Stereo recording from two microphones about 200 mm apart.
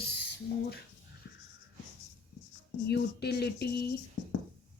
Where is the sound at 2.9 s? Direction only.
55° left (ahead or behind).